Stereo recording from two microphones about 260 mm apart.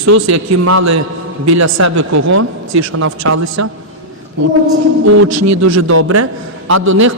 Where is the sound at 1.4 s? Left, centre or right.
Right.